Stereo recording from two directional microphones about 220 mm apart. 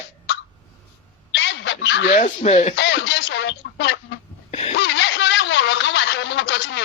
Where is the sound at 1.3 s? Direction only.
55° left (ahead or behind).